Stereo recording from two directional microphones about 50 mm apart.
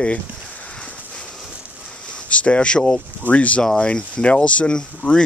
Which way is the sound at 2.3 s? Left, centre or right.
Left.